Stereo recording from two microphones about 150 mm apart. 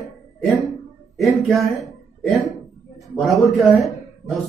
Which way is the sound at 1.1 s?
Centre (ahead or behind).